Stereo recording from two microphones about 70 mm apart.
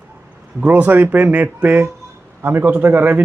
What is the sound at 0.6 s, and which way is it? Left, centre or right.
Speech, right.